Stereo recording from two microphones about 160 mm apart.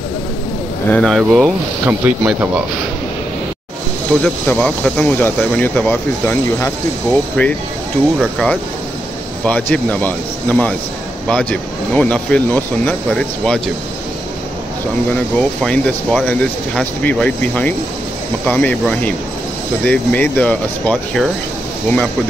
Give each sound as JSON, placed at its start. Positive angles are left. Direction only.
{"t": 0.8, "sound": "speech", "side_deg": 5}
{"t": 1.9, "sound": "speech", "side_deg": -10}
{"t": 4.2, "sound": "speech", "side_deg": 10}
{"t": 9.4, "sound": "speech", "side_deg": 10}
{"t": 15.3, "sound": "speech", "side_deg": 10}